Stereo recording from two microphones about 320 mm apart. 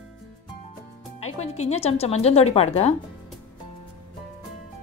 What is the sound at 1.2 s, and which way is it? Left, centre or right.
A woman's voice, centre.